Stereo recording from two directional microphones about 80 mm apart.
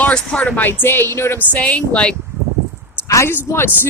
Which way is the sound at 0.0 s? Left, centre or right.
Centre.